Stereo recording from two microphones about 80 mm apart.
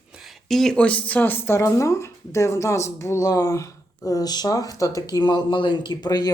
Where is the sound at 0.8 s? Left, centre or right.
Centre.